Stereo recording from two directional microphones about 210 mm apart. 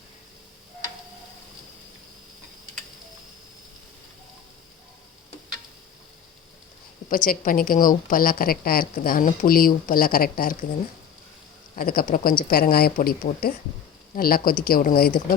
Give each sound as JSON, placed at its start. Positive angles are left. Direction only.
{"t": 7.1, "sound": "a woman's voice", "side_deg": 40}
{"t": 11.8, "sound": "a woman's voice", "side_deg": 45}